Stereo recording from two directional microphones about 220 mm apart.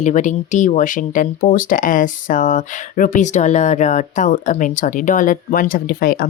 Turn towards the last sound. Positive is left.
turn(degrees=40)  # may be behind; listen again after turning